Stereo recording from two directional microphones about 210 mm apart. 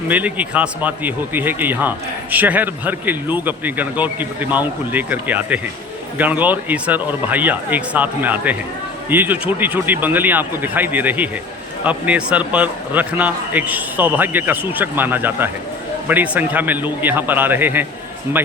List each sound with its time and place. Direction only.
0.1 s a man's voice: 5° right (ahead or behind)